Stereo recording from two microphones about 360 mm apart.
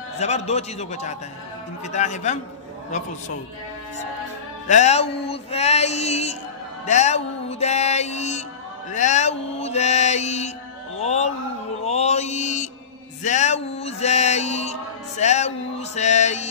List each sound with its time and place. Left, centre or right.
0.2 s music: centre
1.9 s male singing: centre
4.6 s music: centre
8.9 s male singing: centre
11.0 s music: centre
13.2 s male singing: centre